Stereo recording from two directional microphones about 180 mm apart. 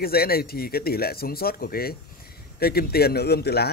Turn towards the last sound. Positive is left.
turn(degrees=65)  # may be behind; listen again after turning